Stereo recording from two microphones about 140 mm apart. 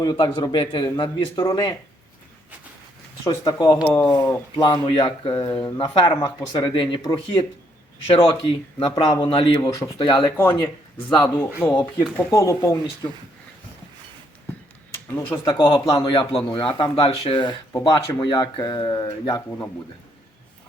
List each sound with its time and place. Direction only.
0.0 s speech: 30° left (ahead or behind)
3.4 s speech: 25° left (ahead or behind)
4.6 s speech: 35° left (ahead or behind)
9.0 s speech: 25° left (ahead or behind)
9.3 s speech: 35° left (ahead or behind)
9.7 s speech: 25° left (ahead or behind)
11.6 s speech: 10° left (ahead or behind)
15.0 s speech: 15° left (ahead or behind)
15.5 s speech: 35° left (ahead or behind)
15.8 s speech: 25° left (ahead or behind)
16.0 s speech: 35° left (ahead or behind)
19.5 s speech: 20° left (ahead or behind)